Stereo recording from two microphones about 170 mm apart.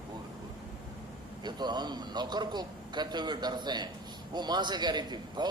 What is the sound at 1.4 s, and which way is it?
A man's voice, 25° right (ahead or behind).